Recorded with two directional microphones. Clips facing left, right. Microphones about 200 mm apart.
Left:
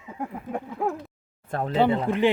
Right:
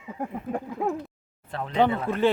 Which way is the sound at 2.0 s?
15° left (ahead or behind).